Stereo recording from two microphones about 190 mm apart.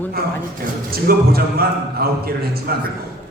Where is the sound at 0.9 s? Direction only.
55° right (ahead or behind).